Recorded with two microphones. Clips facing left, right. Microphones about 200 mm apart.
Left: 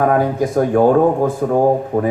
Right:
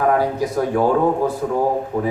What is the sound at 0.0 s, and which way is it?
Speech, 50° left (ahead or behind).